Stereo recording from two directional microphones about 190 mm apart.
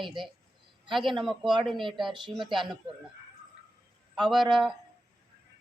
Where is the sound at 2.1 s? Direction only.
25° right (ahead or behind).